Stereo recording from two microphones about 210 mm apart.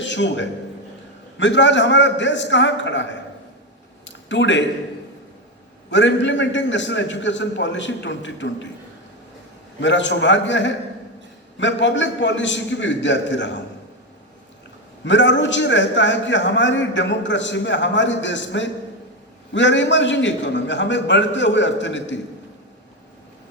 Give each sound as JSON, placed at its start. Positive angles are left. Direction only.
{"t": 0.0, "sound": "a man's voice", "side_deg": 60}
{"t": 4.0, "sound": "a sound", "side_deg": 60}
{"t": 5.9, "sound": "a man's voice", "side_deg": 60}
{"t": 9.8, "sound": "a man's voice", "side_deg": 60}
{"t": 15.0, "sound": "a man's voice", "side_deg": 60}